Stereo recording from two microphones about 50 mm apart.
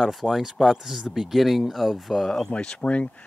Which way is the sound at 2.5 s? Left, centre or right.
Left.